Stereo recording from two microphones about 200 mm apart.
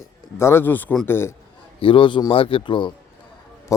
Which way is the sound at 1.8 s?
25° left (ahead or behind).